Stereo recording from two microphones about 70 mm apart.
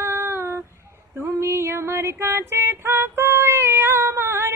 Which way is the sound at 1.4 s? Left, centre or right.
Right.